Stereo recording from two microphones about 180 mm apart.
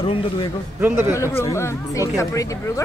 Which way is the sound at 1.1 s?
15° left (ahead or behind).